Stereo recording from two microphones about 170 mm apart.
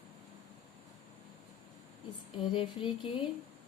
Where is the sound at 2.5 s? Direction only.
30° left (ahead or behind).